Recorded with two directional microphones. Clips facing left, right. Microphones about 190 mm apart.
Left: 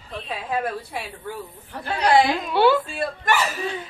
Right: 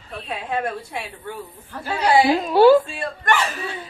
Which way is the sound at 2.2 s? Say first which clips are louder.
Right 6 dB; 40° right (ahead or behind).